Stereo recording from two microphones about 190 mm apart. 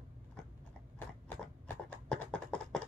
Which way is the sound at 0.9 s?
10° left (ahead or behind).